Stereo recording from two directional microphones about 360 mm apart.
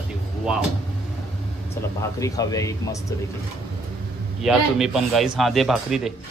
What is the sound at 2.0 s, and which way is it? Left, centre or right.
Speech, centre.